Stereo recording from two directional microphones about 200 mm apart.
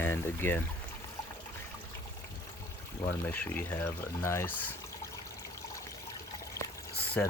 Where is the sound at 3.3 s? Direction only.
10° left (ahead or behind).